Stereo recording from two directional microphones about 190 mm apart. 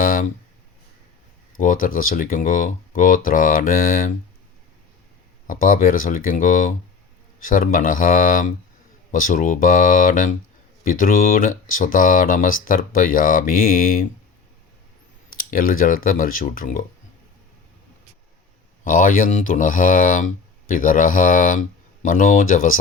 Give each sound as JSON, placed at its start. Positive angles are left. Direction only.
{"t": 0.0, "sound": "a sound", "side_deg": 45}
{"t": 1.5, "sound": "speech", "side_deg": 45}
{"t": 5.5, "sound": "speech", "side_deg": 45}
{"t": 15.4, "sound": "speech", "side_deg": 50}
{"t": 18.9, "sound": "speech", "side_deg": 45}